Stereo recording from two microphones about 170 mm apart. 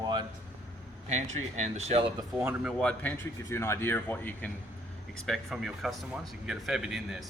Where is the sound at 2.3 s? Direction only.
5° right (ahead or behind).